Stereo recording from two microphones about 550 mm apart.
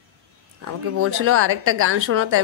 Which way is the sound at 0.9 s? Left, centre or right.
Right.